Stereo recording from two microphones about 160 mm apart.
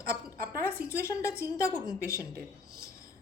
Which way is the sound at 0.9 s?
15° left (ahead or behind).